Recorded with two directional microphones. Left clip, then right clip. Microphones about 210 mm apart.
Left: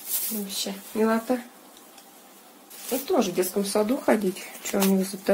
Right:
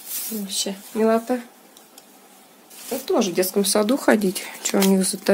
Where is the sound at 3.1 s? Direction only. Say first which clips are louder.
Right 4 dB; 55° right (ahead or behind).